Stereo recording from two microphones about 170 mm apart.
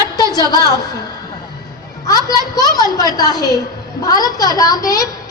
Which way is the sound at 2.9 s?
20° left (ahead or behind).